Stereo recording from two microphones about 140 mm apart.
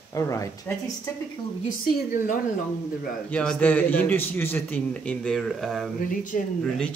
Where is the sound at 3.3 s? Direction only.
10° left (ahead or behind).